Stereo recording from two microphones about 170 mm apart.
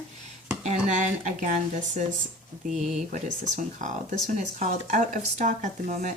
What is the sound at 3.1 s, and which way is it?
Speech, 45° right (ahead or behind).